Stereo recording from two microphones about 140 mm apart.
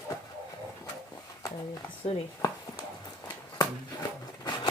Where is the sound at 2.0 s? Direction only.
45° left (ahead or behind).